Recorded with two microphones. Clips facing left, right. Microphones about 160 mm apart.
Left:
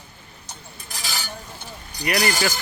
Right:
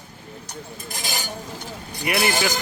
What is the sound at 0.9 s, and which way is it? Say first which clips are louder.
Stir: right 2 dB; 50° right (ahead or behind).